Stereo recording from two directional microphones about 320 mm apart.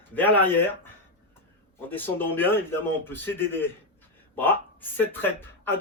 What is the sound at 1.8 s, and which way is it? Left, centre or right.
Speech, centre.